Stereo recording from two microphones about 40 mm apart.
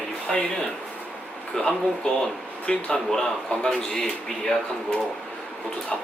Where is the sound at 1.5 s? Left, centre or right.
Centre.